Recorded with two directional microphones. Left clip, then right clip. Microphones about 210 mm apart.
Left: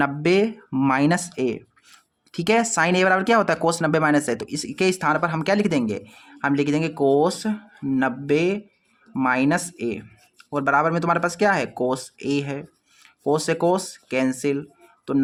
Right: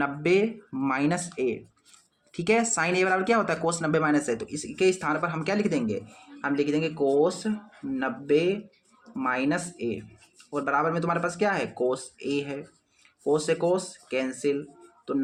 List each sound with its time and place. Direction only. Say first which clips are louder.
0.0 s speech: left 4 dB; 40° left (ahead or behind)